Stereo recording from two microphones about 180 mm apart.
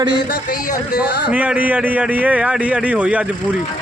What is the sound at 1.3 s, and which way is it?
A man's voice, 10° right (ahead or behind).